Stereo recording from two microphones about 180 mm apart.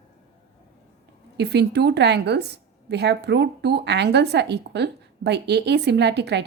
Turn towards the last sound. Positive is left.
turn(degrees=-70)  # may be behind; listen again after turning